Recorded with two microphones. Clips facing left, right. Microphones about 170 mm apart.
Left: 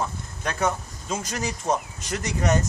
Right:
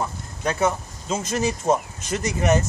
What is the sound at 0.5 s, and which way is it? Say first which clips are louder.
Speech: right 3 dB; 10° right (ahead or behind).